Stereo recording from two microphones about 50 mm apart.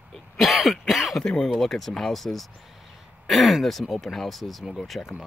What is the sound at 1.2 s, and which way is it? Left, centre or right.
Speech, centre.